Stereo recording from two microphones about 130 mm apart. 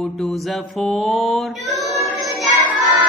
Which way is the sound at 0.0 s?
Centre (ahead or behind).